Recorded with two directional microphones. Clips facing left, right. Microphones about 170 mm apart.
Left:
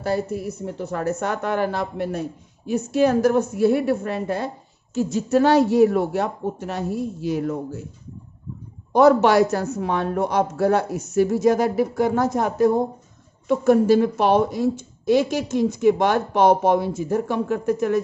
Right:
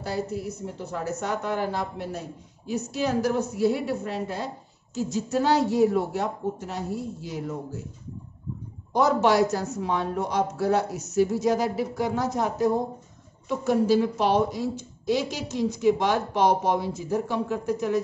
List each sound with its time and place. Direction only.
0.0 s a woman's voice: 55° left (ahead or behind)
8.9 s a woman's voice: 60° left (ahead or behind)